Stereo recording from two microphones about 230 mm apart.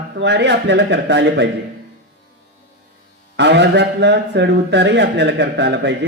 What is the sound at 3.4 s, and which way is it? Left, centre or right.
A man's voice, right.